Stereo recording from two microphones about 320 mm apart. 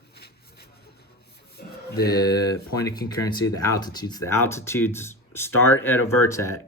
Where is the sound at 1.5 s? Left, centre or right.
Left.